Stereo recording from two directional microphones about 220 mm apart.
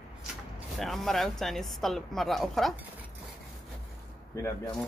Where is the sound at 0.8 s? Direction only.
Centre (ahead or behind).